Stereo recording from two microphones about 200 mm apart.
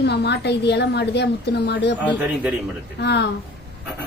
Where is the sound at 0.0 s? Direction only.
55° left (ahead or behind).